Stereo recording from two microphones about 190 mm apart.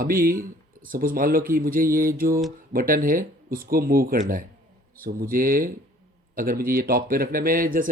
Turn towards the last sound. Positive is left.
turn(degrees=-45)  # may be behind; listen again after turning